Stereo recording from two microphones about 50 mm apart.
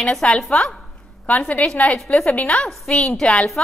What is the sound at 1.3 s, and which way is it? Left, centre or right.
A woman's voice, left.